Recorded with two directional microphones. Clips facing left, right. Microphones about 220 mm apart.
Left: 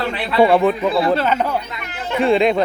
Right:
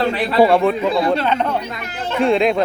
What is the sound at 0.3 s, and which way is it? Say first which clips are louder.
Speech: left 1 dB; centre (ahead or behind).